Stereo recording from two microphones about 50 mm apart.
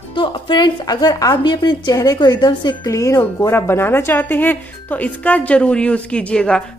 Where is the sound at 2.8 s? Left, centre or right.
Left.